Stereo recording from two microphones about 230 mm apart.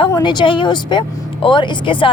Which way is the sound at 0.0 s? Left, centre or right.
Centre.